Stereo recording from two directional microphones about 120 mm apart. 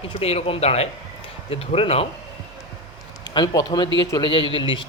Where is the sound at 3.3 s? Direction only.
35° left (ahead or behind).